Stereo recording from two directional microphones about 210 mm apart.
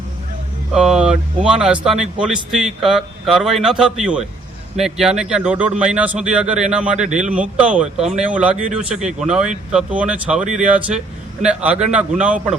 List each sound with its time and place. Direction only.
0.7 s speech: 5° right (ahead or behind)
10.4 s speech: 35° right (ahead or behind)
10.8 s speech: 5° right (ahead or behind)